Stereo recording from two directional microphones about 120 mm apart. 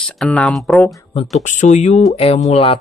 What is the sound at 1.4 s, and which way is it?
Speech, 85° left.